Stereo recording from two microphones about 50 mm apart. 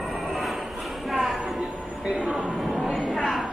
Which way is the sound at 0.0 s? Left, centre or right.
Centre.